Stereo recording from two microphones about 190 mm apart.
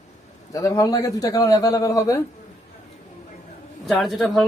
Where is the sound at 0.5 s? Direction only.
15° left (ahead or behind).